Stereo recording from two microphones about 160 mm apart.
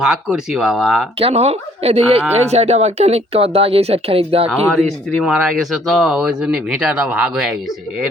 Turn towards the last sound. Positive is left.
turn(degrees=-5)  # may be behind; listen again after turning